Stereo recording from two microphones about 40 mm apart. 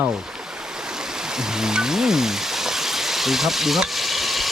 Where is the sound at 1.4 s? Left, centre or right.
Centre.